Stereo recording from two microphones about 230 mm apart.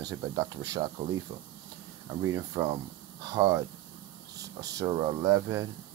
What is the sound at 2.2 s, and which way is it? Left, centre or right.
Speech, centre.